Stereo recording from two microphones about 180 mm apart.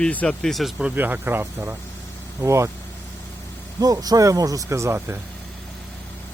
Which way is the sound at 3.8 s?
20° right (ahead or behind).